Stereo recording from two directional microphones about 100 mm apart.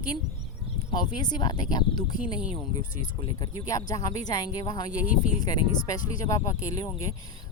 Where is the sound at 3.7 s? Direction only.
35° left (ahead or behind).